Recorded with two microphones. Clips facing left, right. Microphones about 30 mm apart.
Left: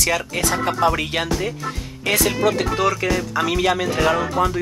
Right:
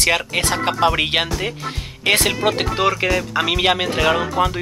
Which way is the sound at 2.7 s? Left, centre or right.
Right.